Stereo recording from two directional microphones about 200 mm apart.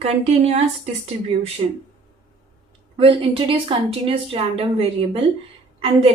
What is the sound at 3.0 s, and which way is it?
A woman's voice, 25° right (ahead or behind).